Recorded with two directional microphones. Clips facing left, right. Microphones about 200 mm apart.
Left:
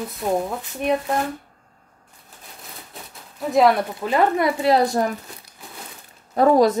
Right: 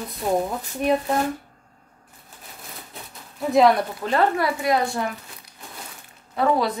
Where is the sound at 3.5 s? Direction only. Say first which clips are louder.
Even; centre (ahead or behind).